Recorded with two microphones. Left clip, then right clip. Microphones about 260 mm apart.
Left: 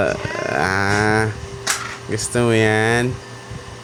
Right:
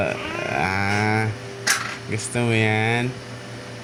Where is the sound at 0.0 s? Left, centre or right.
Left.